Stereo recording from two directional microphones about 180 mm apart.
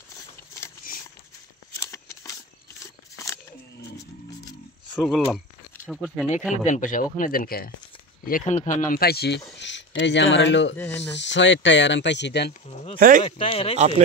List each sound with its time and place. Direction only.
1.8 s a sound: 20° left (ahead or behind)
5.0 s speech: centre (ahead or behind)
6.6 s speech: 45° left (ahead or behind); by 9.4 s 60° left (ahead or behind)
9.6 s speech: 80° left
13.2 s speech: 30° left (ahead or behind)
13.7 s speech: 40° right (ahead or behind)